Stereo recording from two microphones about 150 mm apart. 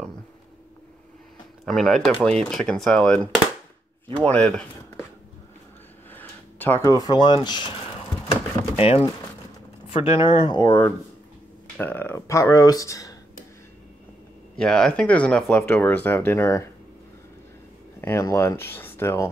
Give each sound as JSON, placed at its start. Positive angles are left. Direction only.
{"t": 1.7, "sound": "speech", "side_deg": 0}
{"t": 6.1, "sound": "speech", "side_deg": 15}
{"t": 8.3, "sound": "a sound", "side_deg": 40}
{"t": 9.9, "sound": "speech", "side_deg": 35}
{"t": 11.8, "sound": "speech", "side_deg": 15}
{"t": 14.6, "sound": "speech", "side_deg": 5}
{"t": 18.0, "sound": "speech", "side_deg": 20}